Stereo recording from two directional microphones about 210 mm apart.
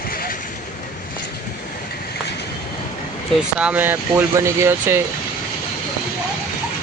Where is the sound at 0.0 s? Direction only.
45° left (ahead or behind).